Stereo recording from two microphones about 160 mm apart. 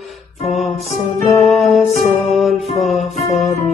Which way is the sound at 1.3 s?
Centre (ahead or behind).